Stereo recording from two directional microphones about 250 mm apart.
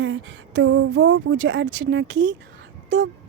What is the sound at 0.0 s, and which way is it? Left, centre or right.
A woman's voice, right.